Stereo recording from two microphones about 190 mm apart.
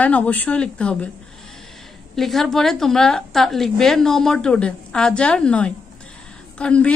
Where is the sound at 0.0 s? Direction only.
10° left (ahead or behind).